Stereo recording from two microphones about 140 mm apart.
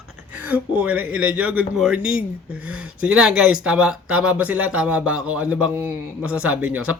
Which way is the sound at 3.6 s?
5° right (ahead or behind).